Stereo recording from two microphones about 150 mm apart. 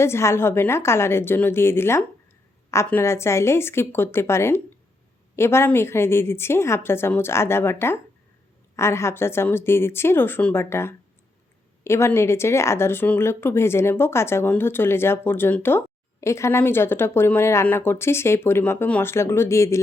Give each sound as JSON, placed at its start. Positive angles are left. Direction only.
{"t": 0.0, "sound": "a woman's voice", "side_deg": 15}